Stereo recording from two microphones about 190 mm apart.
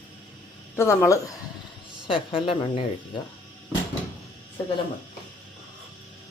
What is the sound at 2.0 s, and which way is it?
Speech, 25° left (ahead or behind).